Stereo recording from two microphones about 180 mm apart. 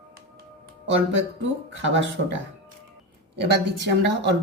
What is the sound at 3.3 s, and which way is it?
A woman's voice, 70° right (ahead or behind).